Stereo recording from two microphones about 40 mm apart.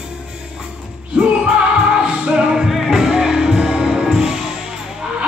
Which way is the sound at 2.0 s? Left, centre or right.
Centre.